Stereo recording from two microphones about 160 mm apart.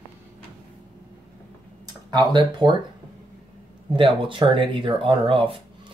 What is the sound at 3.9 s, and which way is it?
Speech, 30° right (ahead or behind).